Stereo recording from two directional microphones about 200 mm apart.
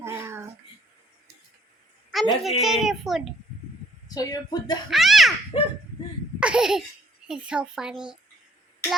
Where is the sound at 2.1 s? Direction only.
Centre (ahead or behind).